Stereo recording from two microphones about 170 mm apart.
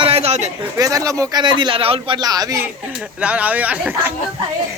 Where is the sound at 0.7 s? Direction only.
20° right (ahead or behind).